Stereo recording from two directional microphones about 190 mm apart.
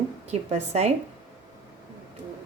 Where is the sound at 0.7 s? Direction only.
35° right (ahead or behind).